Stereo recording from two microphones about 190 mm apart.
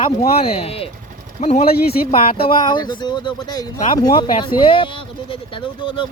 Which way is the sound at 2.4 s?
25° left (ahead or behind).